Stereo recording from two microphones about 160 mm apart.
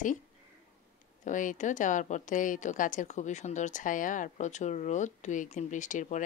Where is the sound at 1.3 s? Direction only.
55° left (ahead or behind).